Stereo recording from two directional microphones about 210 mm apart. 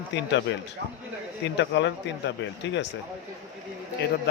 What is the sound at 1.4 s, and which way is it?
Speech, 60° left (ahead or behind).